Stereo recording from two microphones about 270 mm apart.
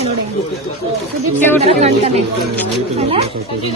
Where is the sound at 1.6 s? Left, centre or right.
Right.